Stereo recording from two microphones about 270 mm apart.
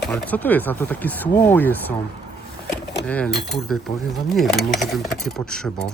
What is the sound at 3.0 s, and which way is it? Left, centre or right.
Speech, centre.